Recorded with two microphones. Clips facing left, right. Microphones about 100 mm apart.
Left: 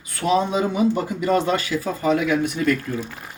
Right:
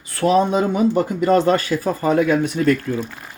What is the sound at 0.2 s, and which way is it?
Speech, 45° right (ahead or behind).